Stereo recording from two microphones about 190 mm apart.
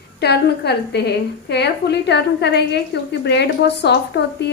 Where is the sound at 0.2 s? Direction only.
60° left (ahead or behind).